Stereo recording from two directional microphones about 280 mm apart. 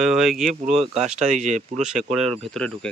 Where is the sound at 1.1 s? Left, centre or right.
Right.